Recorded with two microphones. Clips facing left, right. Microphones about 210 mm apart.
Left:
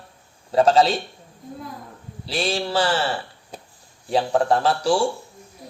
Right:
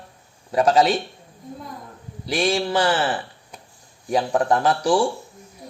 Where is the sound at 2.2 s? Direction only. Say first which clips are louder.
Right 3 dB; 30° left (ahead or behind).